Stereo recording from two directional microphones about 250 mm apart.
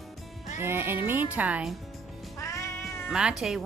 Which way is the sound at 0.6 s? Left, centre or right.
Centre.